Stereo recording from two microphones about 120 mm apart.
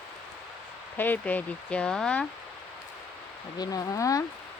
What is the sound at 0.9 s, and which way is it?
Speech, 15° left (ahead or behind).